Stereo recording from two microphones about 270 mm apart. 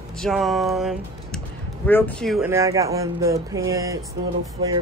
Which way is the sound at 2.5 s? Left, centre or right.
Centre.